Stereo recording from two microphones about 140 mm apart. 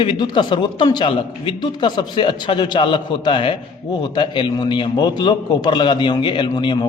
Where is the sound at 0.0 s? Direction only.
35° left (ahead or behind).